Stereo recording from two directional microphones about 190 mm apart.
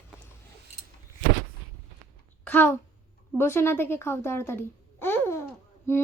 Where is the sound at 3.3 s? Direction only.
10° left (ahead or behind).